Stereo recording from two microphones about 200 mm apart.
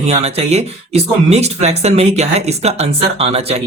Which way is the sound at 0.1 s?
30° right (ahead or behind).